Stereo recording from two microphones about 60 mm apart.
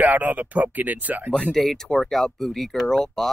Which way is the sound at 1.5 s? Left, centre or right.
Centre.